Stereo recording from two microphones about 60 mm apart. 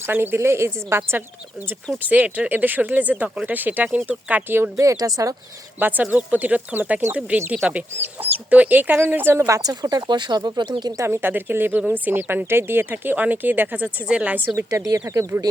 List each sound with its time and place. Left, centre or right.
0.1 s a woman's voice: right
2.0 s speech: right
4.4 s speech: right
4.8 s speech: right
5.8 s speech: right
9.5 s speech: right
11.0 s speech: right
14.5 s speech: right